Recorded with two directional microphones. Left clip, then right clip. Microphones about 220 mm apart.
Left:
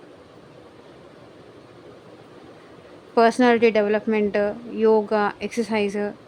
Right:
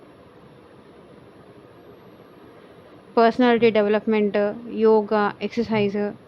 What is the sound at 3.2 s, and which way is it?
A woman's voice, 5° left (ahead or behind).